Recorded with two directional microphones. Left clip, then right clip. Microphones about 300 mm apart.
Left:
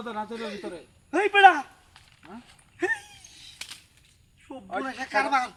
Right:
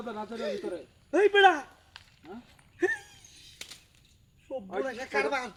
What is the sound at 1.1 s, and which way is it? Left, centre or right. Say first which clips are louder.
Speech: left 4 dB; centre.